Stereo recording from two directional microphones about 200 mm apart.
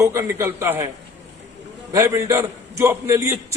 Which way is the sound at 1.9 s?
15° right (ahead or behind).